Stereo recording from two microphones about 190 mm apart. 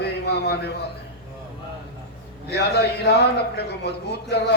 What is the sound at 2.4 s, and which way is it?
Mantra, 60° left (ahead or behind).